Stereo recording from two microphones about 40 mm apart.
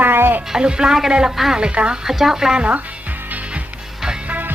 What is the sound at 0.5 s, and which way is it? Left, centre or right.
Speech, centre.